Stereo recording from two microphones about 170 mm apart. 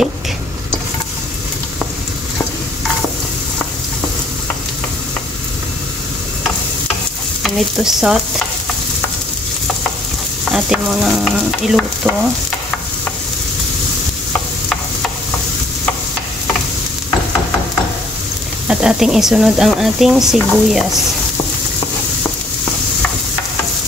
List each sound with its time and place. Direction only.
7.4 s stir: centre (ahead or behind)
10.5 s speech: 5° right (ahead or behind)
18.7 s speech: 5° right (ahead or behind)